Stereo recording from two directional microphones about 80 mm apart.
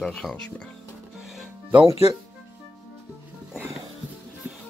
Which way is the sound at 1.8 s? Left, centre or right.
Right.